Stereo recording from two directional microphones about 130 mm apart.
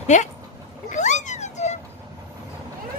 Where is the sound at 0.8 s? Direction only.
70° left (ahead or behind).